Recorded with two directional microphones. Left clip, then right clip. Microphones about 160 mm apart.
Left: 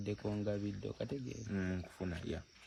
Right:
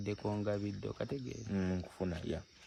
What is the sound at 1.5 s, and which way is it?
Speech, 40° right (ahead or behind).